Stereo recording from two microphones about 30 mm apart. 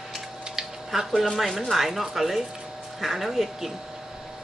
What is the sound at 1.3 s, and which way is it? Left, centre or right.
Speech, centre.